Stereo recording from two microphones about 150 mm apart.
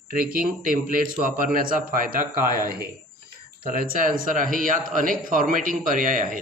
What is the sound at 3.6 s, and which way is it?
Speech, 70° right (ahead or behind).